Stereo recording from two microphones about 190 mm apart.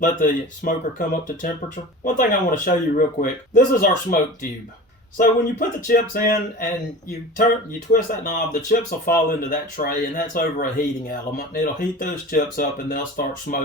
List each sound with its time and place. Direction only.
0.0 s speech: 45° left (ahead or behind)
7.9 s speech: 45° left (ahead or behind)